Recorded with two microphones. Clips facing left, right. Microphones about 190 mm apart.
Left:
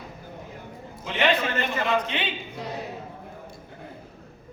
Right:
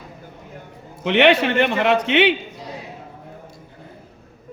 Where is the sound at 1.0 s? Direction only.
75° right (ahead or behind).